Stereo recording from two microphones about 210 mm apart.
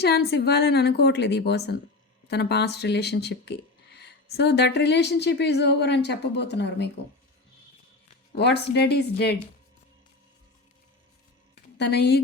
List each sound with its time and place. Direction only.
0.0 s speech: 50° left (ahead or behind)
8.4 s speech: 50° left (ahead or behind)
11.8 s speech: 50° left (ahead or behind)